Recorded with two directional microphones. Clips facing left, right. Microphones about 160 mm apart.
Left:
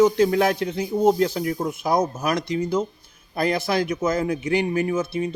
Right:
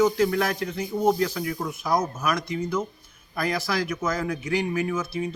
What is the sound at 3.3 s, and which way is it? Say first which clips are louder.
Speech: left 5 dB; 25° left (ahead or behind).